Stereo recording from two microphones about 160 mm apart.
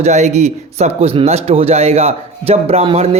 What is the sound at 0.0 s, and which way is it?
A man's voice, 45° right (ahead or behind).